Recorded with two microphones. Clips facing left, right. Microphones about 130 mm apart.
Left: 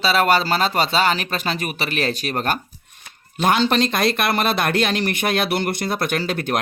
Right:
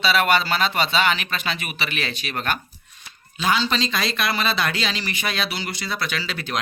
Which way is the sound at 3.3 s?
55° left (ahead or behind).